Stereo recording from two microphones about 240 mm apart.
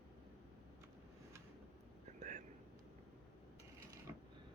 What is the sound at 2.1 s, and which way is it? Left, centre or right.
Whispering, right.